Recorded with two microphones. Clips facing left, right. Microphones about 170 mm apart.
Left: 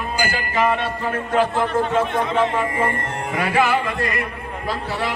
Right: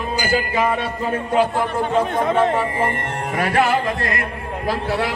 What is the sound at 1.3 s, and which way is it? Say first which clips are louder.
Speech: even; 10° right (ahead or behind).